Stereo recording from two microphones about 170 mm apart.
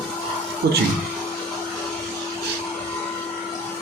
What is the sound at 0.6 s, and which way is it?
Speech, 70° right (ahead or behind).